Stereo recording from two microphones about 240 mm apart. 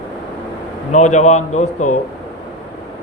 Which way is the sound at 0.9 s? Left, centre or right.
Left.